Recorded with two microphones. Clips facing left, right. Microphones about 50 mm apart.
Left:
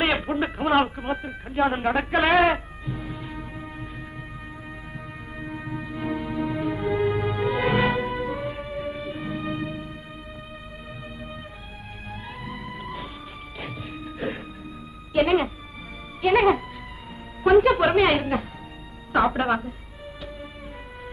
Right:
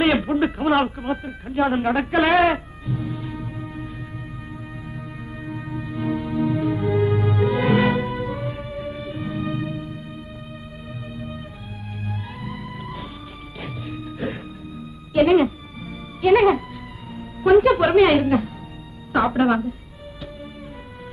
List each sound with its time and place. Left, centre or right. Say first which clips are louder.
0.0 s speech: right 5 dB; centre
2.8 s music: right 5 dB; centre
4.9 s music: right 2 dB; centre
12.0 s music: right 3 dB; centre